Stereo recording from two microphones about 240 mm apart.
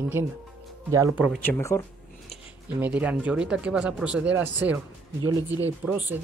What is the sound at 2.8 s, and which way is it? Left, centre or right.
Speech, centre.